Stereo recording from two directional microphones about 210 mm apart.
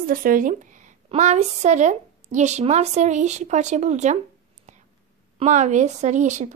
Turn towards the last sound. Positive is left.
turn(degrees=-35)  # may be behind; listen again after turning